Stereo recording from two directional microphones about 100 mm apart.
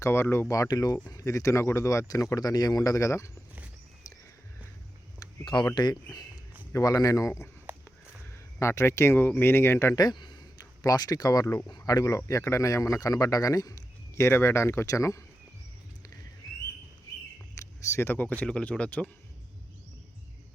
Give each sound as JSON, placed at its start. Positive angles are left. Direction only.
{"t": 0.0, "sound": "speech", "side_deg": 25}
{"t": 5.5, "sound": "speech", "side_deg": 50}
{"t": 8.5, "sound": "speech", "side_deg": 30}
{"t": 10.0, "sound": "speech", "side_deg": 45}
{"t": 17.5, "sound": "speech", "side_deg": 30}